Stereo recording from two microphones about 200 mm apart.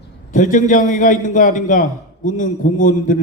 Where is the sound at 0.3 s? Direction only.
40° left (ahead or behind).